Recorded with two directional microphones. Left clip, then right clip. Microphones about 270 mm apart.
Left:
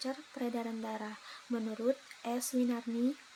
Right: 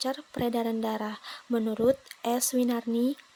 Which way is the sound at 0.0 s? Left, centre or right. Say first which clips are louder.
Right 9 dB; right.